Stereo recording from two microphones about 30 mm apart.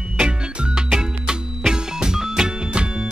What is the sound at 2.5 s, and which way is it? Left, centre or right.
Music, right.